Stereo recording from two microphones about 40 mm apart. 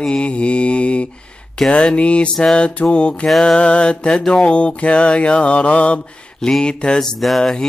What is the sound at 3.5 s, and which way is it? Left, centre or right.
Mantra, left.